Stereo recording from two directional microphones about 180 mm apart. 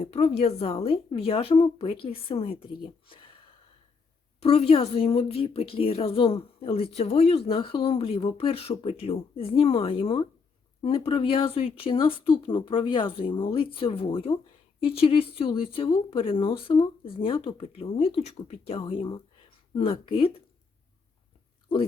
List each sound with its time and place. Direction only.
0.0 s speech: 35° left (ahead or behind)
4.4 s speech: 35° left (ahead or behind)